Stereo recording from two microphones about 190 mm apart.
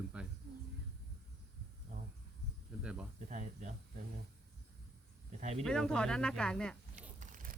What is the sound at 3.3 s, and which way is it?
Speech, 40° right (ahead or behind).